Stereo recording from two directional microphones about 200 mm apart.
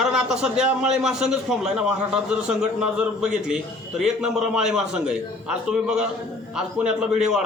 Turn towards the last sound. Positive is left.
turn(degrees=-5)  # may be behind; listen again after turning